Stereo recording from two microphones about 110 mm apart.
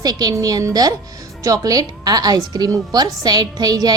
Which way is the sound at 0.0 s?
35° right (ahead or behind).